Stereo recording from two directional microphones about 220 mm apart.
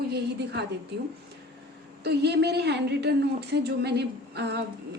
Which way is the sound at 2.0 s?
50° right (ahead or behind).